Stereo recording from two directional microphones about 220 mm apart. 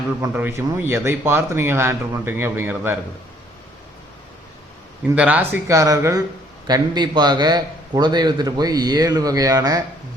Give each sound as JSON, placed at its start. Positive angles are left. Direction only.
{"t": 0.2, "sound": "a man's voice", "side_deg": -10}
{"t": 5.1, "sound": "a man's voice", "side_deg": -5}